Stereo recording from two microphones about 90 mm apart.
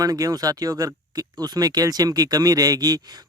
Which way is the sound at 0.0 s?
45° right (ahead or behind).